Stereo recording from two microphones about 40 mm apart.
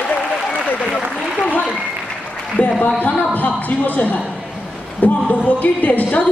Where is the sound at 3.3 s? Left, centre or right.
Left.